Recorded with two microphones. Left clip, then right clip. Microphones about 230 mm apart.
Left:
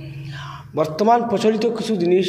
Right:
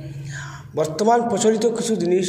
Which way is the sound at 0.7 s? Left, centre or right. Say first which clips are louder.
Left 1 dB; left.